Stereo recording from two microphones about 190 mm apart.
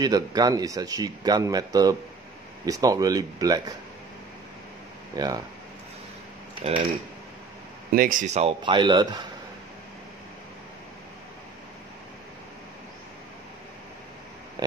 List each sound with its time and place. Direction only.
0.0 s speech: 20° right (ahead or behind)
5.1 s speech: 20° right (ahead or behind)
6.7 s speech: 35° right (ahead or behind)
7.9 s speech: 45° right (ahead or behind); by 9.2 s 25° right (ahead or behind)